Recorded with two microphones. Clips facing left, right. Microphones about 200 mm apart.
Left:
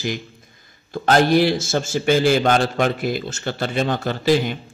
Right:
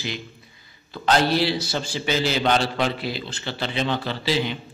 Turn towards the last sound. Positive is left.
turn(degrees=45)  # may be behind; listen again after turning